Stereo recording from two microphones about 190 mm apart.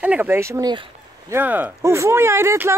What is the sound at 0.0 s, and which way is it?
Speech, 10° right (ahead or behind).